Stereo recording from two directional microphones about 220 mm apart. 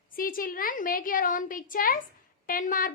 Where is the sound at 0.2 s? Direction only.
40° left (ahead or behind).